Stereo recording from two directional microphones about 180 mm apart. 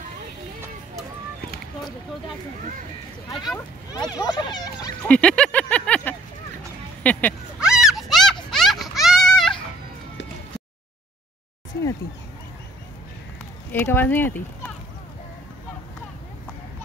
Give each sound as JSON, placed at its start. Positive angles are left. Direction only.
{"t": 3.5, "sound": "speech", "side_deg": 20}
{"t": 5.0, "sound": "speech", "side_deg": 5}
{"t": 7.0, "sound": "a sound", "side_deg": 10}
{"t": 7.6, "sound": "a sound", "side_deg": -5}
{"t": 8.5, "sound": "music", "side_deg": 0}
{"t": 13.7, "sound": "speech", "side_deg": 10}